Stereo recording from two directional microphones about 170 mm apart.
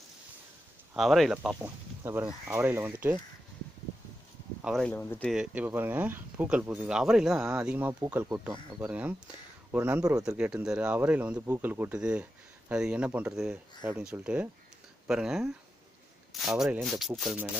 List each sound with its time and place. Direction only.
0.9 s speech: centre (ahead or behind)
4.6 s speech: 5° right (ahead or behind)
4.8 s speech: 10° left (ahead or behind)
5.3 s speech: 5° right (ahead or behind)
8.8 s speech: 10° right (ahead or behind)